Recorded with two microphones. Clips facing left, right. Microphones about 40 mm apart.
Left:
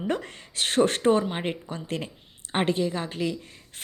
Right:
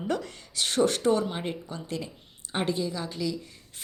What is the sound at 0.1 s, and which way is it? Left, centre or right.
A woman's voice, left.